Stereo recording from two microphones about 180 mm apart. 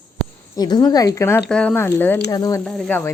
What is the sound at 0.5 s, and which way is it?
Speech, 20° left (ahead or behind).